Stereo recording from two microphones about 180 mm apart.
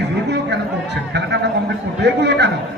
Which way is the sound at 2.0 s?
70° right (ahead or behind).